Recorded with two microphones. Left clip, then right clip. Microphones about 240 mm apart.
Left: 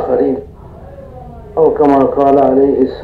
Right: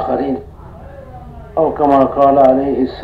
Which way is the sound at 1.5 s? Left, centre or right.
Right.